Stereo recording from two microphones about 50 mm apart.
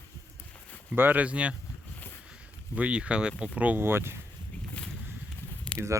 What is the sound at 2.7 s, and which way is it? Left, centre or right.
Speech, right.